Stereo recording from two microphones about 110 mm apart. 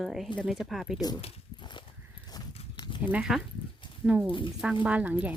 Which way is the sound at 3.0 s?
15° right (ahead or behind).